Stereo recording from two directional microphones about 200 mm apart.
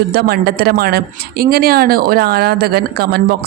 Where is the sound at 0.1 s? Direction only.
50° right (ahead or behind).